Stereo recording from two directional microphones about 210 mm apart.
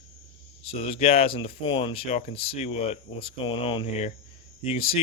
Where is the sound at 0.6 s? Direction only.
25° left (ahead or behind).